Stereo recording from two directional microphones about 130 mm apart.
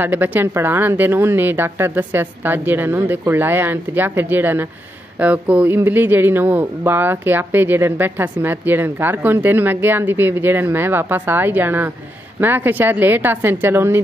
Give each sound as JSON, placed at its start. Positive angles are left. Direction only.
{"t": 0.0, "sound": "speech", "side_deg": -15}